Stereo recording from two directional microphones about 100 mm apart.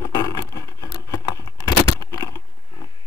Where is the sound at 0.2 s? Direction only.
35° left (ahead or behind).